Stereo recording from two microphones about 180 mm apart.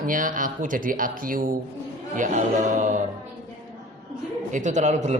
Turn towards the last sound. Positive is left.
turn(degrees=-40)  # may be behind; listen again after turning